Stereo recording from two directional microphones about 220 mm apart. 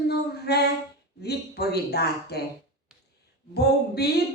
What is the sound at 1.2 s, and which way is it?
A man's voice, 45° left (ahead or behind).